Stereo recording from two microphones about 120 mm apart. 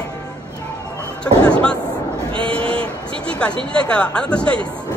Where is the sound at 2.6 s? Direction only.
50° right (ahead or behind).